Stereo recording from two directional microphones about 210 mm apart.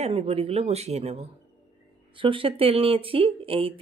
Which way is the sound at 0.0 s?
30° right (ahead or behind).